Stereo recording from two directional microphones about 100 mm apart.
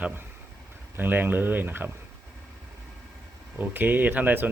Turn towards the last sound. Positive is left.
turn(degrees=-15)  # may be behind; listen again after turning